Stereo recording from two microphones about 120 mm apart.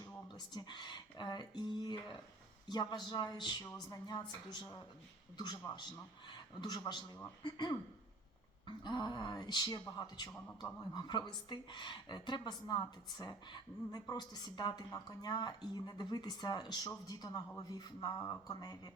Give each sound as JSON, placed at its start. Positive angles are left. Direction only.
{"t": 0.3, "sound": "a woman's voice", "side_deg": 40}
{"t": 5.7, "sound": "a woman's voice", "side_deg": 35}